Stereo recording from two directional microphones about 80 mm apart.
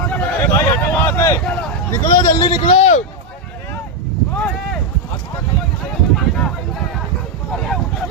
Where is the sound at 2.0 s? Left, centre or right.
Left.